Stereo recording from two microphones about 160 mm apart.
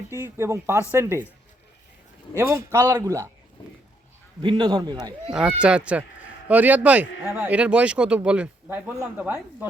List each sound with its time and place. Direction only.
0.1 s a man's voice: 15° right (ahead or behind)
2.4 s a man's voice: 15° right (ahead or behind)
4.4 s a man's voice: 30° right (ahead or behind)
5.3 s a man's voice: 5° right (ahead or behind)